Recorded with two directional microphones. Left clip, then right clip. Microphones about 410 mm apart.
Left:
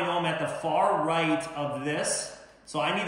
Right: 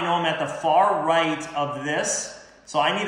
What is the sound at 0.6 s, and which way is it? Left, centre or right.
Speech, centre.